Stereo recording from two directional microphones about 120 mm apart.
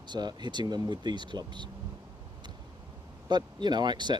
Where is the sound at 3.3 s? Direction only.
40° right (ahead or behind).